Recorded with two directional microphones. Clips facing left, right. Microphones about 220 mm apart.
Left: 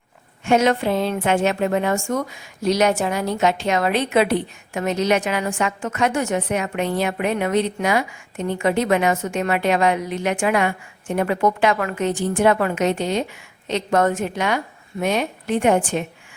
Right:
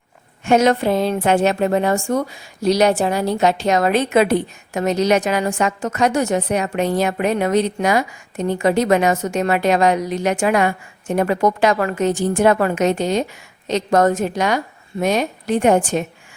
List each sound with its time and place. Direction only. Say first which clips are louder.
0.4 s a woman's voice: right 3 dB; 40° right (ahead or behind)